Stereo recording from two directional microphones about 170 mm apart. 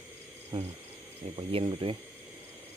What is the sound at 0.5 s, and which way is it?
Speech, 30° right (ahead or behind).